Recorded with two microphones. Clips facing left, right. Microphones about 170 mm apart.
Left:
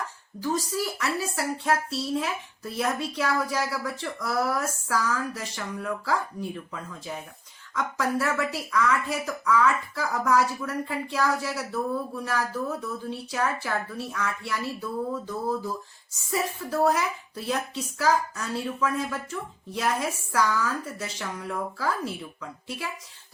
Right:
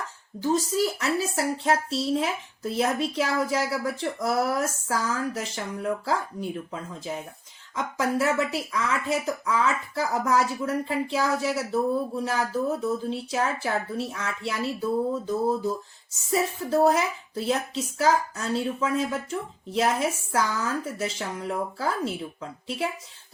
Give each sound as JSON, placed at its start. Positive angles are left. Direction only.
{"t": 0.3, "sound": "speech", "side_deg": -25}